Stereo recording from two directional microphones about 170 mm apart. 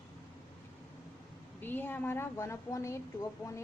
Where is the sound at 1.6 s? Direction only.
10° left (ahead or behind).